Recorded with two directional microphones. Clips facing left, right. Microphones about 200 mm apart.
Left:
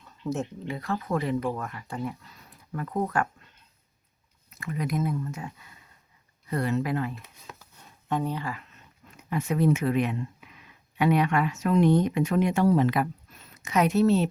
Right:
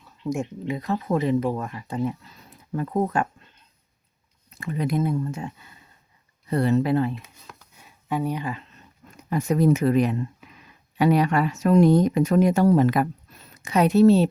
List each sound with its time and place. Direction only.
0.0 s speech: 15° right (ahead or behind)
4.5 s speech: 30° right (ahead or behind)
7.8 s speech: 5° right (ahead or behind)
9.0 s speech: 40° right (ahead or behind)
13.7 s speech: 35° right (ahead or behind)